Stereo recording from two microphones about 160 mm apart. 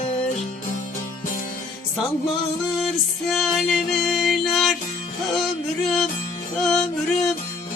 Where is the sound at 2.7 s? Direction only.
Centre (ahead or behind).